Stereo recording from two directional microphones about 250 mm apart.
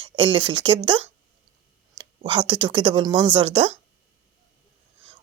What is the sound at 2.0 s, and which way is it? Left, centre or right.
A woman's voice, centre.